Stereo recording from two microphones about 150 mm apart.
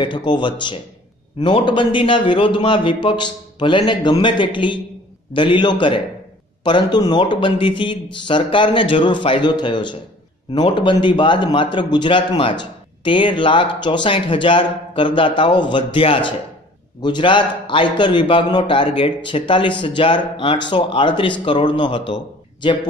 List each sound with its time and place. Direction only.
0.0 s a man's voice: 30° left (ahead or behind)